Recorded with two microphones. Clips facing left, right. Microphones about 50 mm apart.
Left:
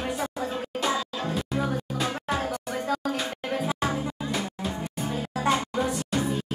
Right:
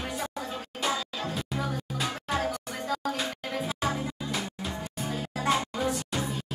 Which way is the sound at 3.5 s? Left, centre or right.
Centre.